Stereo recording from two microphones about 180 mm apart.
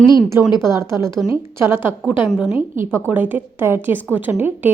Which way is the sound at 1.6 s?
10° right (ahead or behind).